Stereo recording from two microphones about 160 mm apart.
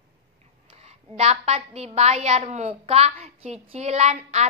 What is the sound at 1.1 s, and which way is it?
A woman's voice, 40° right (ahead or behind).